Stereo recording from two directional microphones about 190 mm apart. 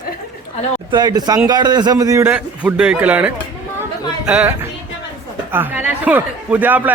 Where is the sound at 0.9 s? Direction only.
20° right (ahead or behind).